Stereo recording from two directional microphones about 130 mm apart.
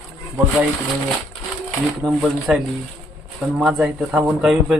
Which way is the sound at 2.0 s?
5° right (ahead or behind).